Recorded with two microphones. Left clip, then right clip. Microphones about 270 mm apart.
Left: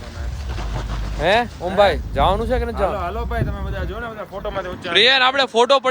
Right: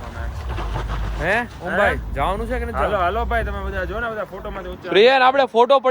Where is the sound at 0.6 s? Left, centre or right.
Right.